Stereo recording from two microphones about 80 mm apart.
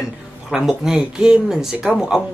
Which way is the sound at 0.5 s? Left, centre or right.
Centre.